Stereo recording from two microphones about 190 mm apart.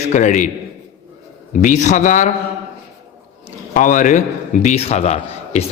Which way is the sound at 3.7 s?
40° left (ahead or behind).